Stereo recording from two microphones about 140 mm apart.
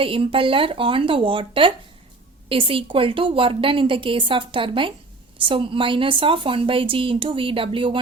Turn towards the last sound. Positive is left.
turn(degrees=-40)  # may be behind; listen again after turning